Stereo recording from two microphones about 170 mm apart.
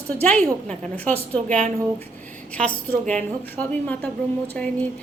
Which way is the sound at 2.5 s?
10° left (ahead or behind).